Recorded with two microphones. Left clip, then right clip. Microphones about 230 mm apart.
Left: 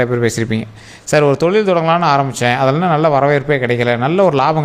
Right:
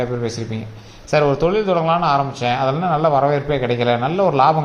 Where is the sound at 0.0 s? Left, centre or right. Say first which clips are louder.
Left 7 dB; left.